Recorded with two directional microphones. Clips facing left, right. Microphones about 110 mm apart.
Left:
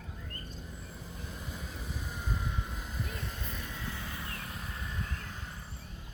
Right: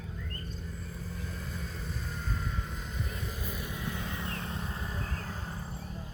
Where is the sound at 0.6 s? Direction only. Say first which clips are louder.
Right 4 dB; 15° left (ahead or behind).